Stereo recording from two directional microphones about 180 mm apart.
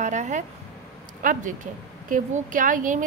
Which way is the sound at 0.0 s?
40° right (ahead or behind).